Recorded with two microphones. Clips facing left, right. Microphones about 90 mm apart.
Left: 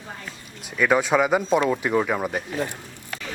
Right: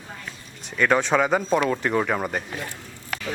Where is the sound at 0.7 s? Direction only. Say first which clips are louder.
Left 1 dB; 5° left (ahead or behind).